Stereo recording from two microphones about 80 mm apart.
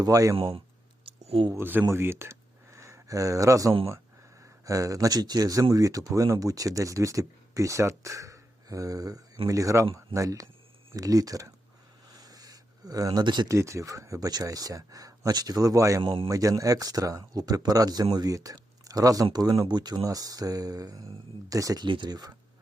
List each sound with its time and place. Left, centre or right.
0.0 s speech: right
1.5 s speech: right
12.1 s a sound: right
13.2 s speech: right
13.5 s speech: right
20.0 s speech: right
21.8 s speech: right